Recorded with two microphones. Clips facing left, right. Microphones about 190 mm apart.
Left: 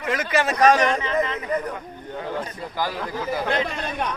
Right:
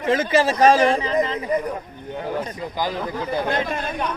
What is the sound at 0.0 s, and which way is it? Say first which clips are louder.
A man's voice: right 5 dB; 30° right (ahead or behind).